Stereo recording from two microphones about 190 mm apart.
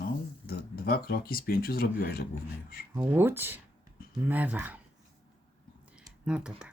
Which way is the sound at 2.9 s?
10° right (ahead or behind).